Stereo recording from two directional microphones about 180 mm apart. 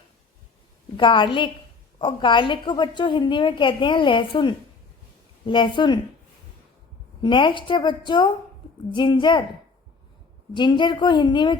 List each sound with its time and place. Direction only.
0.9 s a woman's voice: 25° left (ahead or behind)
7.2 s a woman's voice: 25° left (ahead or behind)
10.5 s a woman's voice: 25° left (ahead or behind)